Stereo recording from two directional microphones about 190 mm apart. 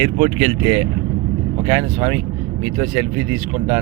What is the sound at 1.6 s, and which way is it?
Speech, 10° right (ahead or behind).